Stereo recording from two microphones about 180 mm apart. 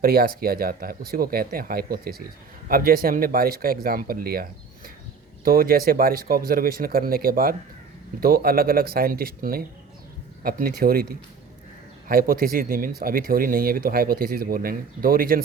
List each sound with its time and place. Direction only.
0.0 s speech: 55° right (ahead or behind)
5.5 s speech: 55° right (ahead or behind)